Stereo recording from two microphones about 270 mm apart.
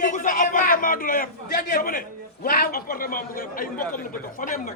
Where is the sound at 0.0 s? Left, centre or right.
Left.